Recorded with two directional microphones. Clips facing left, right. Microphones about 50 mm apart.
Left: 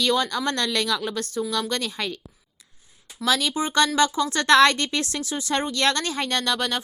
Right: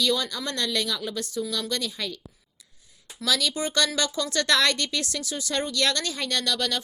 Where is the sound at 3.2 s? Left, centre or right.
Left.